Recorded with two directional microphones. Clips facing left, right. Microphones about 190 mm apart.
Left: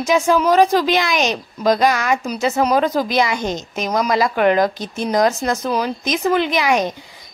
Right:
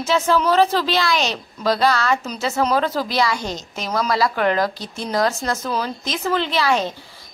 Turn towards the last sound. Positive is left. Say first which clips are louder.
# left 2 dB
turn(degrees=15)  # may be behind; listen again after turning